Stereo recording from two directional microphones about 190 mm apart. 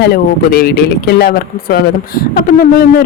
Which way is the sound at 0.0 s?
50° left (ahead or behind).